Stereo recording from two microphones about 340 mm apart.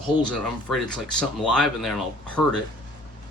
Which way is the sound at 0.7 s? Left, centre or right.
Centre.